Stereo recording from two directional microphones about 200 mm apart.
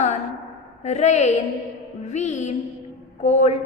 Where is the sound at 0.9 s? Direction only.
35° left (ahead or behind).